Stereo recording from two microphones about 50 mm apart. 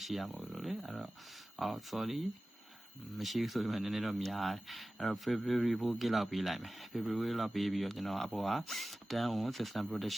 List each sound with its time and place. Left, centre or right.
0.0 s speech: centre